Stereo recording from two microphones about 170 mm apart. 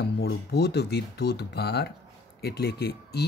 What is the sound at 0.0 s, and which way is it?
Speech, 70° left (ahead or behind).